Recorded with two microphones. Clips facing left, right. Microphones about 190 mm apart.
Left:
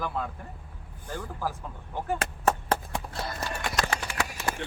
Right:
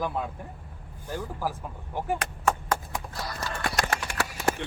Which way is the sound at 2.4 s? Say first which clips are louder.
Left 1 dB; 30° left (ahead or behind).